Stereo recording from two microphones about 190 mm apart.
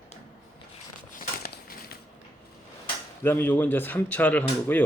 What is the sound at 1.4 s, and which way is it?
Crushing, 55° left (ahead or behind).